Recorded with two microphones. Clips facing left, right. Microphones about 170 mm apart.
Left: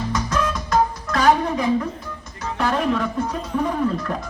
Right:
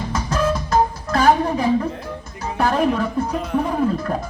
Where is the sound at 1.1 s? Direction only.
30° right (ahead or behind).